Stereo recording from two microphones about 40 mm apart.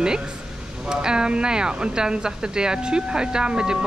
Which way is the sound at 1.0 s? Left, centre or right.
Right.